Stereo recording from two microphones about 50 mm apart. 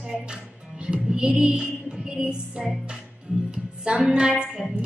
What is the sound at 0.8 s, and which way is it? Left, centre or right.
Music, centre.